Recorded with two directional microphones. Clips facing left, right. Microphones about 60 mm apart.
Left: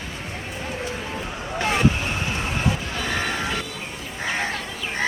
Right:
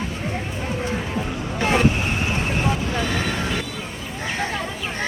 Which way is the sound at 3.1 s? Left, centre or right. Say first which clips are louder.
Right 1 dB; left.